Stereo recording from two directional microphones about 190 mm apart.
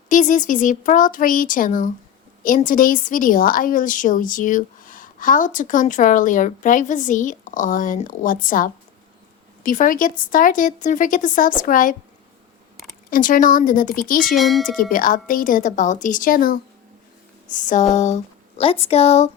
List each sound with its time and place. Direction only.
0.1 s a woman's voice: 45° left (ahead or behind)
13.1 s a woman's voice: 45° left (ahead or behind)
14.3 s speech: centre (ahead or behind)
14.8 s a woman's voice: 45° left (ahead or behind)